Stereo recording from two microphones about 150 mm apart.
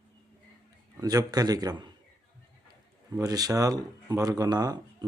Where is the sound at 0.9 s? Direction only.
25° right (ahead or behind).